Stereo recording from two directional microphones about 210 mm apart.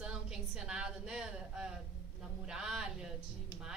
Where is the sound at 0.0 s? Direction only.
5° right (ahead or behind).